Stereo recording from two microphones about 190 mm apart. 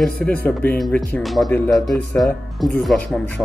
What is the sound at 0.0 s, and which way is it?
Speech, 5° left (ahead or behind).